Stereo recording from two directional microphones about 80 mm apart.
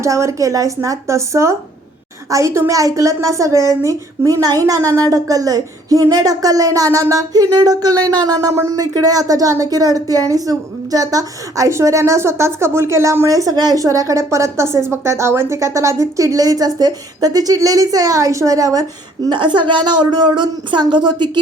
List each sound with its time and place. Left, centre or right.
0.0 s a woman's voice: right
19.3 s a woman's voice: right